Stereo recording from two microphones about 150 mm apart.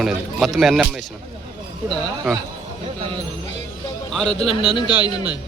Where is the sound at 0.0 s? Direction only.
Centre (ahead or behind).